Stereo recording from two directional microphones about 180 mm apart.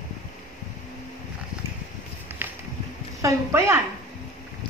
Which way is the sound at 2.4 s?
15° right (ahead or behind).